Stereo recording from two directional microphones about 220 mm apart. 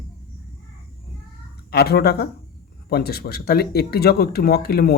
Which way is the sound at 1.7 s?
45° left (ahead or behind).